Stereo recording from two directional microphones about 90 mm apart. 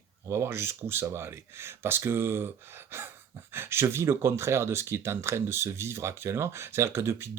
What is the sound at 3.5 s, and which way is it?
Speech, 30° right (ahead or behind).